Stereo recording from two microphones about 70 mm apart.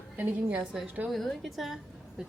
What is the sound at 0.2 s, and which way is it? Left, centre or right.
Speech, right.